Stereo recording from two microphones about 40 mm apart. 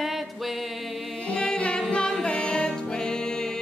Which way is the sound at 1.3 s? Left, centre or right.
Left.